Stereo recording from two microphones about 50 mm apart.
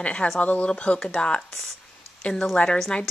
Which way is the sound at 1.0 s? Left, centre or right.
Centre.